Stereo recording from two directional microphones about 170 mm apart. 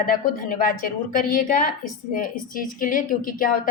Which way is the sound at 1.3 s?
55° left (ahead or behind).